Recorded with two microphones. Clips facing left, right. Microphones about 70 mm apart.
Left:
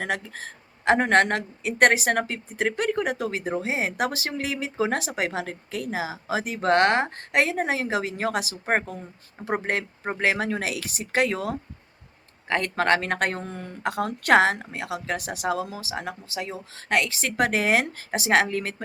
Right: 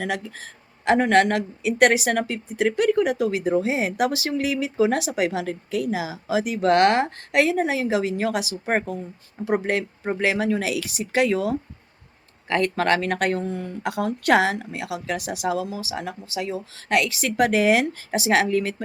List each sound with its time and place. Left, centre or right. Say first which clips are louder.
0.0 s speech: right 1 dB; left
12.6 s speech: right 1 dB; left